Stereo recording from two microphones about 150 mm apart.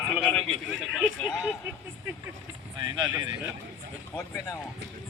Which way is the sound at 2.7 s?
30° right (ahead or behind).